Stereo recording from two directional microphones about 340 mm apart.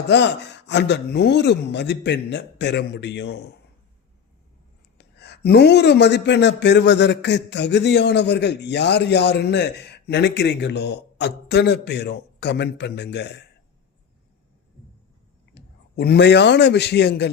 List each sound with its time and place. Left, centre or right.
0.1 s speech: left
4.9 s speech: left
15.5 s a man's voice: left